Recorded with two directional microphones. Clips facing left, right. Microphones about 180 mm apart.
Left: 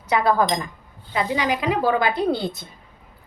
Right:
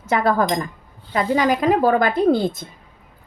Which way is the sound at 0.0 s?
50° right (ahead or behind).